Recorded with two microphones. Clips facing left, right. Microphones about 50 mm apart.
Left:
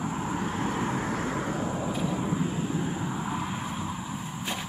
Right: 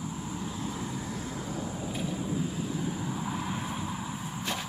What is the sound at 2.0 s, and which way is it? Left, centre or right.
Vehicle, left.